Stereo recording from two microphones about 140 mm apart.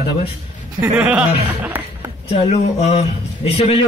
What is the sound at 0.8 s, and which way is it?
Speech, 10° right (ahead or behind).